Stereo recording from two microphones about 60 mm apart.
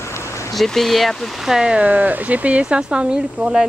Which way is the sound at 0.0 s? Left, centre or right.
Left.